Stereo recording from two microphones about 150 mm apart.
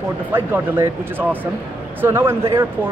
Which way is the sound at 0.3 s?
15° right (ahead or behind).